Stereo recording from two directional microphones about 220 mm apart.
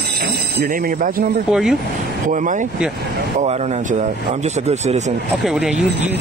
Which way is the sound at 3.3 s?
30° right (ahead or behind).